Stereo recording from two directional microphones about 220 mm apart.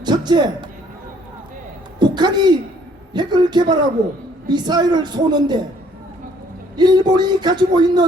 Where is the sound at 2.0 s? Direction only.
20° right (ahead or behind).